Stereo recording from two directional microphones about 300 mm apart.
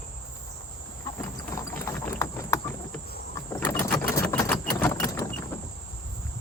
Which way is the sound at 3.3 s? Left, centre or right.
Centre.